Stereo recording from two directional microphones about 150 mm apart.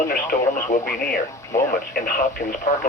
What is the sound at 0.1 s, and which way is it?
Speech, 65° left (ahead or behind).